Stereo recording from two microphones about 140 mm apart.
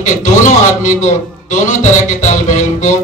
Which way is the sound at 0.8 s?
60° left (ahead or behind).